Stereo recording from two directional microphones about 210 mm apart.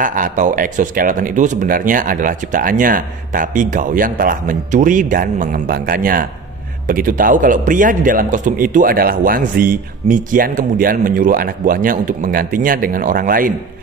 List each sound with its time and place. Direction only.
0.0 s a man's voice: 40° right (ahead or behind)